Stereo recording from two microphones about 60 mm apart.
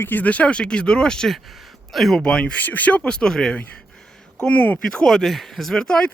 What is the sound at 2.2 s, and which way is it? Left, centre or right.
Speech, centre.